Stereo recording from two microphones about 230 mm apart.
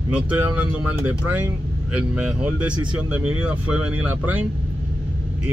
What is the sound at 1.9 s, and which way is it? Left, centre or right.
Speech, centre.